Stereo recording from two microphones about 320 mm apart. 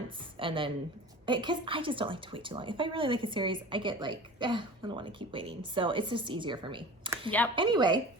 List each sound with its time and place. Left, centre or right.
0.3 s a woman's voice: centre
7.3 s speech: centre
7.5 s a woman's voice: centre